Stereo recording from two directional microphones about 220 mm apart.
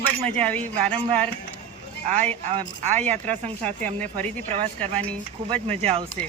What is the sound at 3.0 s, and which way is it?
Speech, 5° left (ahead or behind).